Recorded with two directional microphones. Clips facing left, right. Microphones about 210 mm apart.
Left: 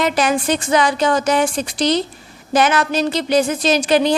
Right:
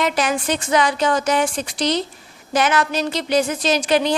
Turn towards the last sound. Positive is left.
turn(degrees=35)  # may be behind; listen again after turning